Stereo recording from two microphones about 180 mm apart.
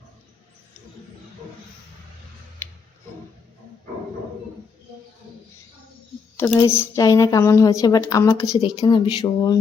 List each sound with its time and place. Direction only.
6.3 s speech: 15° left (ahead or behind)